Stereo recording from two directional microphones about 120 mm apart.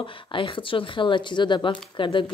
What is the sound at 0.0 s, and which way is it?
Speech, 45° left (ahead or behind).